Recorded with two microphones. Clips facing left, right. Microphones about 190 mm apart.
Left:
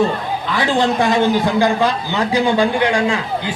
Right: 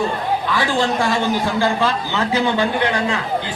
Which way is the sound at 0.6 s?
20° left (ahead or behind).